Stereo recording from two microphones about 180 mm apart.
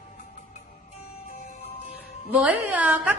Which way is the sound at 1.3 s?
45° left (ahead or behind).